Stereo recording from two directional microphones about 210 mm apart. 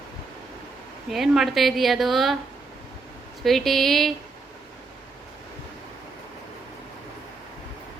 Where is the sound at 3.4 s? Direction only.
Centre (ahead or behind).